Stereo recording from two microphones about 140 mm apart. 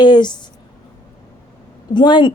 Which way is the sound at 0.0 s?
30° left (ahead or behind).